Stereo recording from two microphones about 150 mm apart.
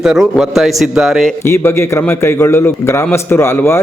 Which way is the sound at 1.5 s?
15° left (ahead or behind).